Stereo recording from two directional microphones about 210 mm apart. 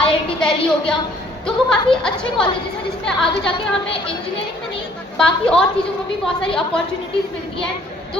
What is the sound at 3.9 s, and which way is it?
Speech, 25° left (ahead or behind).